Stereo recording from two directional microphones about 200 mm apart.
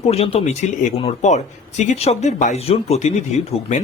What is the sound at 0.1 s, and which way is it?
A man's voice, 30° left (ahead or behind).